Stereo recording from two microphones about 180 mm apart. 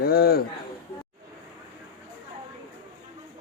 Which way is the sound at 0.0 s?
55° left (ahead or behind).